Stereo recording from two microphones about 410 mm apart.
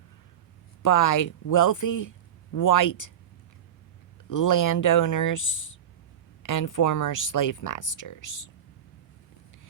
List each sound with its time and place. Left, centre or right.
0.8 s speech: left
4.3 s speech: left